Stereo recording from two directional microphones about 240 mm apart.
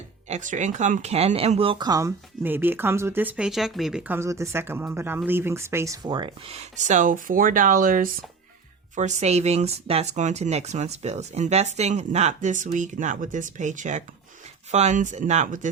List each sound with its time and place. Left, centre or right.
0.3 s speech: right